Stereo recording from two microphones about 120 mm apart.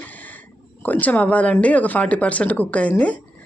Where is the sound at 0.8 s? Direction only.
15° left (ahead or behind).